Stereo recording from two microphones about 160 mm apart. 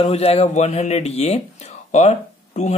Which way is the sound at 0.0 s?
40° left (ahead or behind).